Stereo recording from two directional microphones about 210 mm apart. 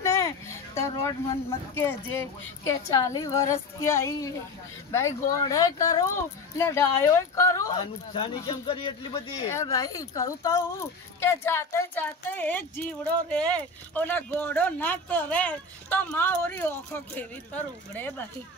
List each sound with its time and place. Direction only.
0.0 s a sound: 15° left (ahead or behind)
1.0 s speech: 15° left (ahead or behind)
5.3 s speech: 15° left (ahead or behind)